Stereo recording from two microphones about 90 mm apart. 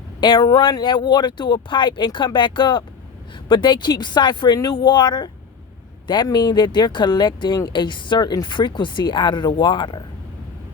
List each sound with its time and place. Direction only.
0.2 s speech: 60° left (ahead or behind)